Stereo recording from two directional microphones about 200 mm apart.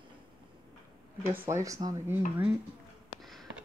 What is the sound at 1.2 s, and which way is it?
Speech, 10° right (ahead or behind).